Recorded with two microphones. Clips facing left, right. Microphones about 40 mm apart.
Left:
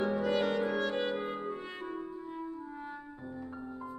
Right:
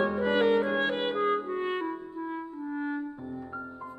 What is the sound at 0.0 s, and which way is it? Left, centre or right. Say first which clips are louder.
Music: right 5 dB; right.